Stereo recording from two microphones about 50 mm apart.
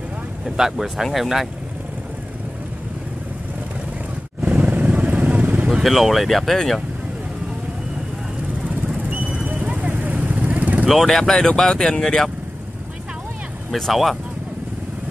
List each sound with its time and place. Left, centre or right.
0.6 s speech: centre
4.6 s vehicle: right
5.7 s speech: centre
8.6 s vehicle: right
11.1 s speech: centre
13.7 s speech: centre